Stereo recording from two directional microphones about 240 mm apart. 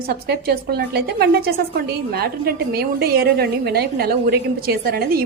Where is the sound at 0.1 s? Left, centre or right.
Right.